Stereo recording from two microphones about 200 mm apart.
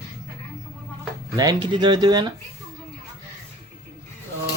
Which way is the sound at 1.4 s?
20° right (ahead or behind).